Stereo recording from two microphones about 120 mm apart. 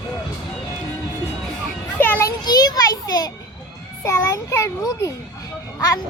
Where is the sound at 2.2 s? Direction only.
35° left (ahead or behind).